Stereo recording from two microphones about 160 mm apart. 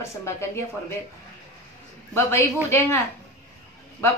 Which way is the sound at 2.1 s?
15° left (ahead or behind).